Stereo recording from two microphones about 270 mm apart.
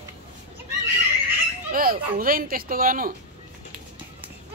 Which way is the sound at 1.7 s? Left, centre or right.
Right.